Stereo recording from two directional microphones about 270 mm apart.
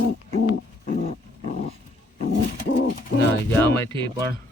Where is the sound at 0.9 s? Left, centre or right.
Left.